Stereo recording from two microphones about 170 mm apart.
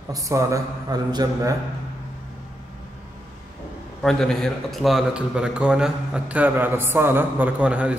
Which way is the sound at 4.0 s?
Centre (ahead or behind).